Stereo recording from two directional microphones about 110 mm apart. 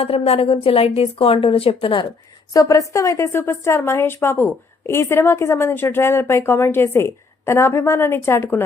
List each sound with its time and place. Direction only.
0.0 s a woman's voice: 60° left (ahead or behind)
2.5 s a woman's voice: 30° left (ahead or behind)